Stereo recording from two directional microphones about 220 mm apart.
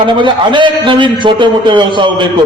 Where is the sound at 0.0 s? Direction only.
20° right (ahead or behind).